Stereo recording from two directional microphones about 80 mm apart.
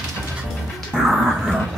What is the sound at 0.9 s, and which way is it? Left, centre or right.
Dog, centre.